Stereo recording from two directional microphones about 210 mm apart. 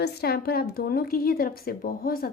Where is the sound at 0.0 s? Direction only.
50° left (ahead or behind).